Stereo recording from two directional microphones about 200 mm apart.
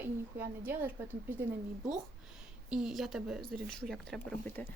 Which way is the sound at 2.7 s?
Centre (ahead or behind).